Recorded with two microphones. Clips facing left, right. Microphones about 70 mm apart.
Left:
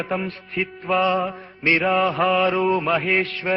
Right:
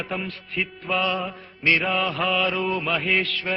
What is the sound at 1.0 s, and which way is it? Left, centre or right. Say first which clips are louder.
Mantra: left 6 dB; left.